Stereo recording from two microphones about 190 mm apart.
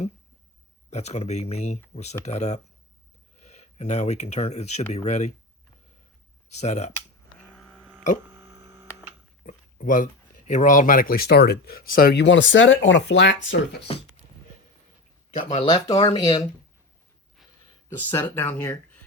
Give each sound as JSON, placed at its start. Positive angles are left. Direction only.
{"t": 0.9, "sound": "speech", "side_deg": 35}
{"t": 6.5, "sound": "speech", "side_deg": 35}
{"t": 7.3, "sound": "a sound", "side_deg": 0}
{"t": 8.3, "sound": "a sound", "side_deg": -15}
{"t": 9.5, "sound": "speech", "side_deg": 45}
{"t": 15.3, "sound": "speech", "side_deg": 35}
{"t": 15.7, "sound": "speech", "side_deg": 20}
{"t": 17.8, "sound": "speech", "side_deg": 10}